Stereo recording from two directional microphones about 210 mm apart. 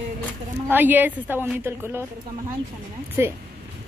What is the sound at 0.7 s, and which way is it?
A woman's voice, 10° right (ahead or behind).